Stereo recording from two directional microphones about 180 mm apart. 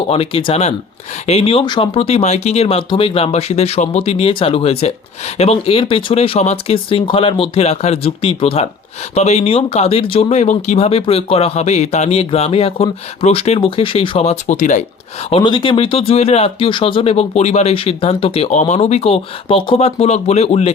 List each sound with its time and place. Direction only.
0.1 s speech: 30° left (ahead or behind)
15.3 s speech: 25° left (ahead or behind)